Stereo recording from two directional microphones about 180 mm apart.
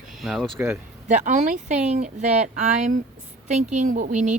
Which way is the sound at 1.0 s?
40° right (ahead or behind).